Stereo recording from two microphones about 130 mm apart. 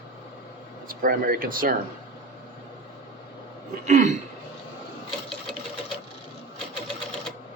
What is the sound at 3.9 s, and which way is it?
Speech, 65° right (ahead or behind).